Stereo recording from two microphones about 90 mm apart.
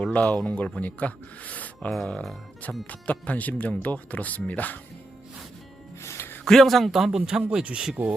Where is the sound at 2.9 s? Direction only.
15° left (ahead or behind).